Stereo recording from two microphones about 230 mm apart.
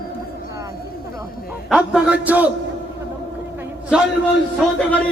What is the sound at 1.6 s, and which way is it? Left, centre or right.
Speech, centre.